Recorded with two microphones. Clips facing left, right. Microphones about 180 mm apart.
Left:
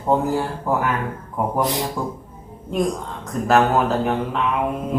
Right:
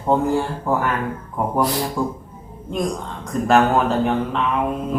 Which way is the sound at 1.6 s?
20° left (ahead or behind).